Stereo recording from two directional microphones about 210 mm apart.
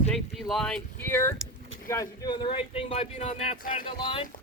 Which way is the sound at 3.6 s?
40° left (ahead or behind).